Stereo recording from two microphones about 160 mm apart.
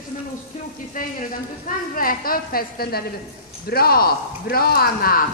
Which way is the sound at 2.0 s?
65° left (ahead or behind).